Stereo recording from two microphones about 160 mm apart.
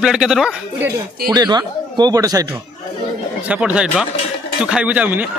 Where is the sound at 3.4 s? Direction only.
10° right (ahead or behind).